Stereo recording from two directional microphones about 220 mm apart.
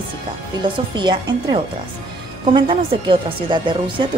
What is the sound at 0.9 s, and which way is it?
A woman's voice, 20° right (ahead or behind).